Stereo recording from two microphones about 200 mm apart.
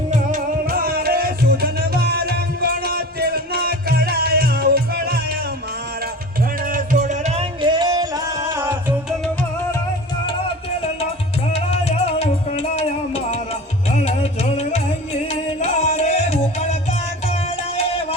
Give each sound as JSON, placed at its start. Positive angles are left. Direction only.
{"t": 0.1, "sound": "music", "side_deg": -40}
{"t": 6.6, "sound": "music", "side_deg": -45}
{"t": 11.5, "sound": "music", "side_deg": 30}